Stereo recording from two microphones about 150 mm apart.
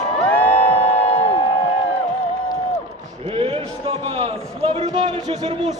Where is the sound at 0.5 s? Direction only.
40° left (ahead or behind).